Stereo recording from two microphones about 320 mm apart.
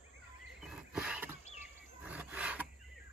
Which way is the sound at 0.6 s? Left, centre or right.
Centre.